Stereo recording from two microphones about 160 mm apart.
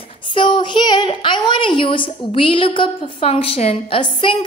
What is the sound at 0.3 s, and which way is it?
A woman's voice, 30° left (ahead or behind).